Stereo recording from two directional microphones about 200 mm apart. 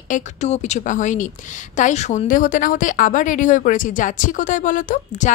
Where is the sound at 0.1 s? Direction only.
35° left (ahead or behind).